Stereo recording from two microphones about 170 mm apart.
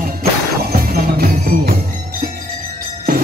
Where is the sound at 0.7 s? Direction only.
65° right (ahead or behind).